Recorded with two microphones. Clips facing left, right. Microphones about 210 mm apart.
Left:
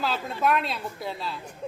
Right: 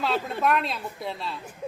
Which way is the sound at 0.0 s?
Centre (ahead or behind).